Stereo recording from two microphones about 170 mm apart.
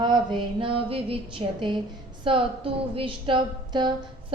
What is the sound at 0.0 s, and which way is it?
A woman's voice, 25° right (ahead or behind).